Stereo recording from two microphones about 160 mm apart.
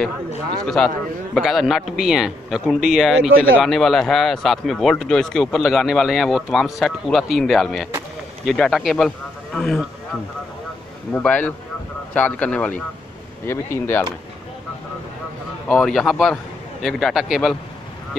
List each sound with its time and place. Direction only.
0.7 s a man's voice: centre (ahead or behind)
11.1 s speech: 10° left (ahead or behind)
15.7 s a man's voice: centre (ahead or behind)